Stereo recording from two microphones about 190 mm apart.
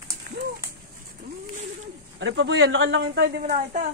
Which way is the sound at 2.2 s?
75° right (ahead or behind).